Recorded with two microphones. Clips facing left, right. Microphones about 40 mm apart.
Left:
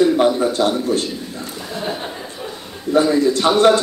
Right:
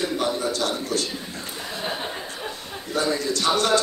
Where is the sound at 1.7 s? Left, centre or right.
Centre.